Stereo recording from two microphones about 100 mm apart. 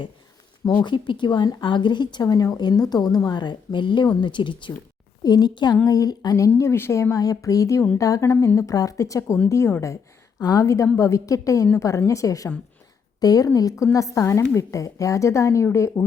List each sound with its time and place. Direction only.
0.9 s a woman's voice: 50° left (ahead or behind); by 6.5 s 35° left (ahead or behind)
6.6 s speech: 25° left (ahead or behind)